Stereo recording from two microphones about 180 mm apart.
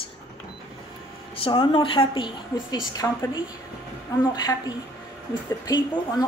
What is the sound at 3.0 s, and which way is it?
Speech, 10° left (ahead or behind).